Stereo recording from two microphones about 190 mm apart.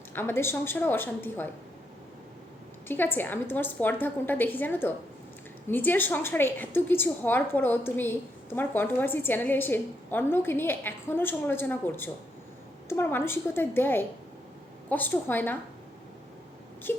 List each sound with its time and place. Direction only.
0.1 s a woman's voice: 10° left (ahead or behind)
2.8 s a woman's voice: 10° left (ahead or behind)
16.9 s speech: 10° left (ahead or behind)